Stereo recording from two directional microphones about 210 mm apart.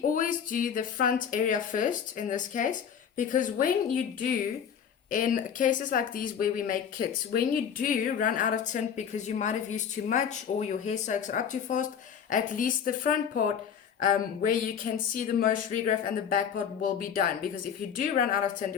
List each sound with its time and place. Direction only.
0.1 s speech: 40° left (ahead or behind)
5.1 s speech: 40° left (ahead or behind)